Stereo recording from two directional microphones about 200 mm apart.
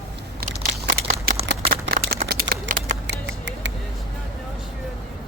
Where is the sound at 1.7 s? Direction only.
50° right (ahead or behind).